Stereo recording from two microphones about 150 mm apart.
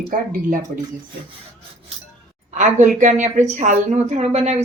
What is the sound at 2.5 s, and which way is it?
A woman's voice, 55° right (ahead or behind).